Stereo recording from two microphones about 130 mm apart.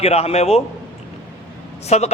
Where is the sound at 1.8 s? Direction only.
55° left (ahead or behind).